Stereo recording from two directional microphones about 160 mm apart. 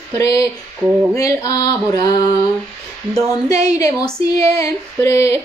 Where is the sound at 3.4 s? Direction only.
20° left (ahead or behind).